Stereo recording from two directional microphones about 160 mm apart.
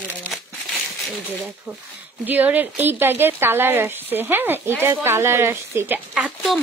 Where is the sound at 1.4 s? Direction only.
10° right (ahead or behind).